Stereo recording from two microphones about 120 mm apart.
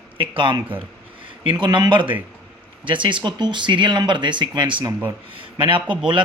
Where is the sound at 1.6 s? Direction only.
40° right (ahead or behind).